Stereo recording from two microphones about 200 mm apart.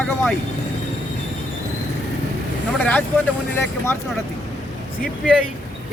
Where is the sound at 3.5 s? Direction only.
10° left (ahead or behind).